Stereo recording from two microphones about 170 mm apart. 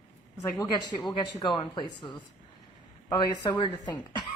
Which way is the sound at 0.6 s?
25° left (ahead or behind).